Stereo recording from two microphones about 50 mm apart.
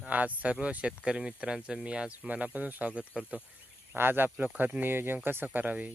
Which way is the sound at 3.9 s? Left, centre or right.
Right.